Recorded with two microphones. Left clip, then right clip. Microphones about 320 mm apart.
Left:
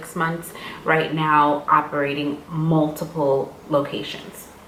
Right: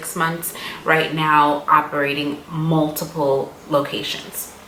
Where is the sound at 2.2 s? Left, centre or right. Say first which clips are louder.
Right 1 dB; left.